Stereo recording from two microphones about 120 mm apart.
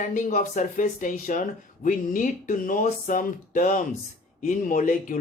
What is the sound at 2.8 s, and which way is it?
Speech, 90° left.